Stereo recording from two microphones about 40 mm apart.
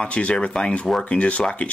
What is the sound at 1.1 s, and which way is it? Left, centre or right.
Speech, left.